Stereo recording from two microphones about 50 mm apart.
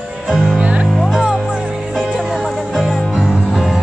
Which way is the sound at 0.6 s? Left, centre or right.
Right.